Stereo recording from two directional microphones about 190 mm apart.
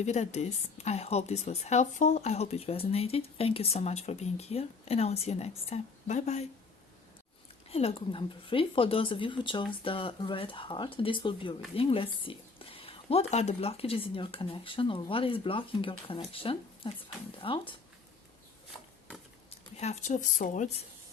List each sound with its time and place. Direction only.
0.0 s a woman's voice: 35° left (ahead or behind)
7.7 s speech: 30° left (ahead or behind)
19.7 s a woman's voice: 35° left (ahead or behind)